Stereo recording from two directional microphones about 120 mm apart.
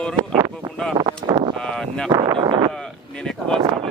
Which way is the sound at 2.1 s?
35° right (ahead or behind).